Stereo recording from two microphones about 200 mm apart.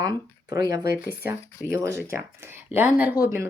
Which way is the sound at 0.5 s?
15° right (ahead or behind).